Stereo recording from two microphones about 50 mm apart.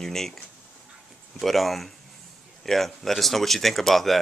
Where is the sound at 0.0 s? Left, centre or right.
Centre.